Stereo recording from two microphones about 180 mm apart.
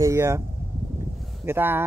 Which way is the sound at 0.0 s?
15° right (ahead or behind).